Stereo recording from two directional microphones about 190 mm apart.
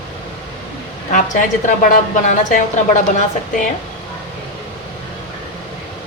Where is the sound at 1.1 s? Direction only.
45° left (ahead or behind).